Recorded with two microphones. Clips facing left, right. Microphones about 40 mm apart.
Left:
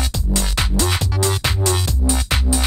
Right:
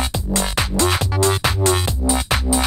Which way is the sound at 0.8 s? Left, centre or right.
Right.